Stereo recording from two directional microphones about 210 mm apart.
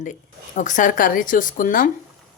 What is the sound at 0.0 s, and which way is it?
A woman's voice, 35° left (ahead or behind).